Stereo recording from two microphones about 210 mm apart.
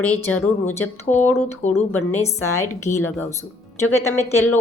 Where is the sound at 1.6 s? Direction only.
35° left (ahead or behind).